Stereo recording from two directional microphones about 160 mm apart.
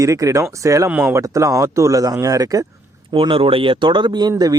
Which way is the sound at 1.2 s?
20° right (ahead or behind).